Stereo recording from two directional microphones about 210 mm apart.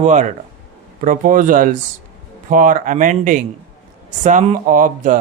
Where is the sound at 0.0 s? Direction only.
35° right (ahead or behind).